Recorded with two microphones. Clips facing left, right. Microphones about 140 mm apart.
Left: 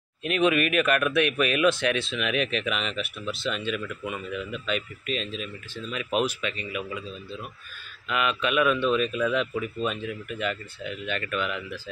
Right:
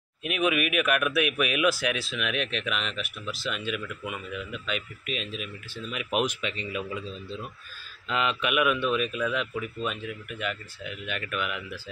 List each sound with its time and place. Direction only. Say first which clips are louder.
0.2 s speech: left 3 dB; 5° right (ahead or behind); by 7.0 s 25° right (ahead or behind)
8.1 s a man's voice: left 1 dB; 20° right (ahead or behind)